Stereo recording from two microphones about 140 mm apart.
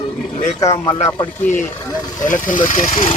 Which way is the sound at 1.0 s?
35° left (ahead or behind).